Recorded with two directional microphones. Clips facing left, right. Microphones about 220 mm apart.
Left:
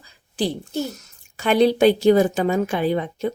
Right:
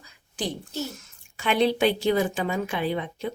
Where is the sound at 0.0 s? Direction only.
35° left (ahead or behind).